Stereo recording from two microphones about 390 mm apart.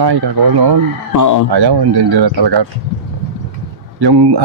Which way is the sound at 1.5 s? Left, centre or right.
Right.